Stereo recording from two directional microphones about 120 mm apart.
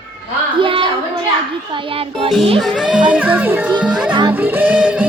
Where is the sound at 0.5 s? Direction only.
45° right (ahead or behind).